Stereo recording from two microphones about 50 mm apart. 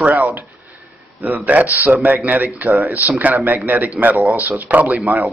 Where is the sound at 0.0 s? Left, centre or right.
Right.